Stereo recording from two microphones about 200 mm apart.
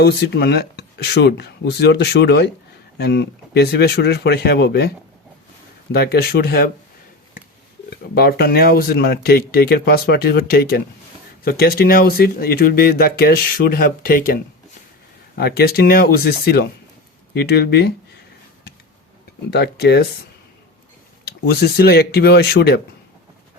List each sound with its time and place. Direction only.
0.0 s speech: 55° left (ahead or behind)
5.9 s speech: 50° left (ahead or behind)
7.9 s speech: 50° left (ahead or behind)
19.5 s speech: 55° left (ahead or behind)
21.2 s speech: 55° left (ahead or behind)